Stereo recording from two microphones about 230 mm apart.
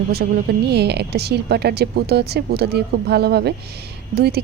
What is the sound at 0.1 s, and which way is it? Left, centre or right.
Speech, right.